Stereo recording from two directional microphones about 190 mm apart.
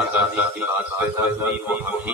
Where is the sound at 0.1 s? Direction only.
10° right (ahead or behind).